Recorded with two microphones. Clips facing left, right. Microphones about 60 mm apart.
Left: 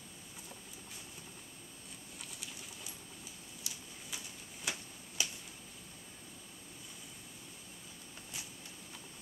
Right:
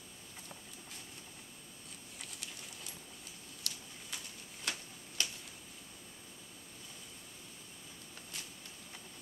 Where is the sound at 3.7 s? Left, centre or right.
Centre.